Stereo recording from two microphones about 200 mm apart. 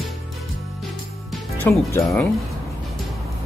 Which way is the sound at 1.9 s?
15° left (ahead or behind).